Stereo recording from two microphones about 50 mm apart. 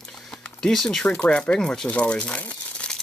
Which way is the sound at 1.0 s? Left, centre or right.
Left.